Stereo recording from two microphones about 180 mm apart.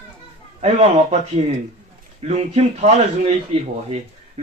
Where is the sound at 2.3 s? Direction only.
40° right (ahead or behind).